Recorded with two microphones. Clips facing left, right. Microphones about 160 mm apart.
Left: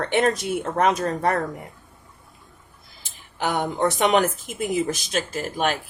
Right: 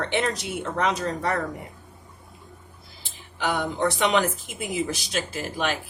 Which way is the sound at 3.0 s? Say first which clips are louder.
Left 1 dB; 45° left (ahead or behind).